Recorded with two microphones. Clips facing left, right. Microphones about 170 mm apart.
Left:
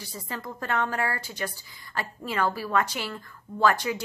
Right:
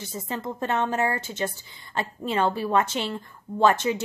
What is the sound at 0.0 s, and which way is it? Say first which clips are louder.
A woman's voice: right 5 dB; 20° right (ahead or behind).